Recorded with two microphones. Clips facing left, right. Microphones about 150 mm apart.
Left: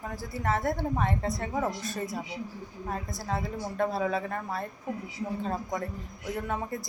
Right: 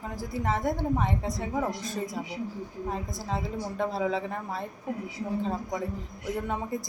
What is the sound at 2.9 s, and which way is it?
A woman's voice, 15° right (ahead or behind).